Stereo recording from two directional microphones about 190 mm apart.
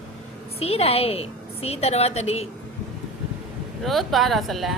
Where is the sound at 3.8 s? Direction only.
Centre (ahead or behind).